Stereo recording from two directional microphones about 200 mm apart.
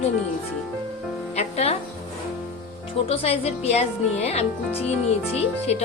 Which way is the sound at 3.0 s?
30° left (ahead or behind).